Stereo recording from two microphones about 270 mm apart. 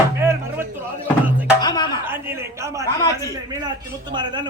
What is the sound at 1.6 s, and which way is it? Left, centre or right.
Music, centre.